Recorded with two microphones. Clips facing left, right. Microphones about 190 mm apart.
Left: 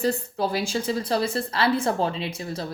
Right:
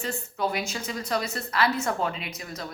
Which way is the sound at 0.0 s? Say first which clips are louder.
Left 5 dB; 35° left (ahead or behind).